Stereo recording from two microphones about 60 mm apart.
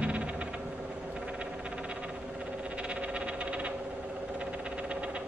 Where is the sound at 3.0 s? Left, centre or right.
Centre.